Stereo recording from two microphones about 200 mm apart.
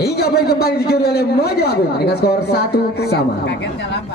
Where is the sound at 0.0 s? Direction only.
55° left (ahead or behind).